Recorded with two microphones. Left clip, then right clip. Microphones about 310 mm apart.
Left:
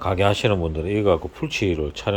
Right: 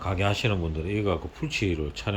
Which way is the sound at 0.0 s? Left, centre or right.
Centre.